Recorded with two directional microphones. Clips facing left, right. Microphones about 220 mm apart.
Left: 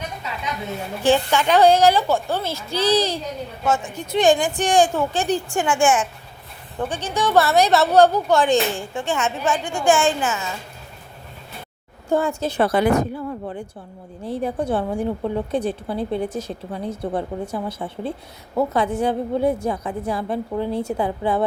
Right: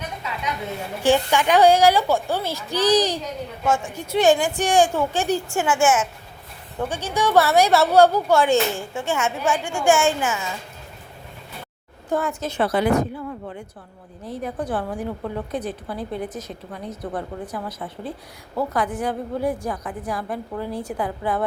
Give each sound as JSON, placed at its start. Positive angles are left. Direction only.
{"t": 1.0, "sound": "a woman's voice", "side_deg": -15}
{"t": 12.0, "sound": "a woman's voice", "side_deg": 25}